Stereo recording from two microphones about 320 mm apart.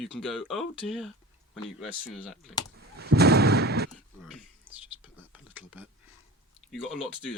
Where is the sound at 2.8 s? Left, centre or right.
Right.